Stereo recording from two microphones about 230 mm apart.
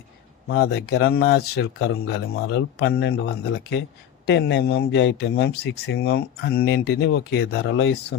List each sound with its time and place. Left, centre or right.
0.4 s speech: left